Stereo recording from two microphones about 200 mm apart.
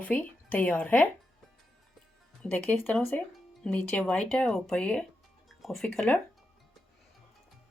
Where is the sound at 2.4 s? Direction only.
10° left (ahead or behind).